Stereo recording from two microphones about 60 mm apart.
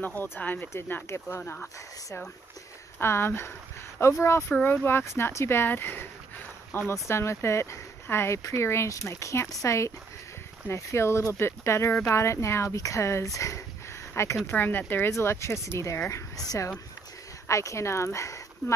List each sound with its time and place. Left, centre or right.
0.0 s speech: left
1.0 s speech: left
1.4 s speech: left
3.0 s speech: left
6.9 s speech: left
14.1 s speech: left
15.0 s speech: left
17.5 s speech: left